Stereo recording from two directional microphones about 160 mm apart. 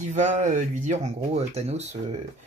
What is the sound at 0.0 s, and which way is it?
Speech, 50° right (ahead or behind).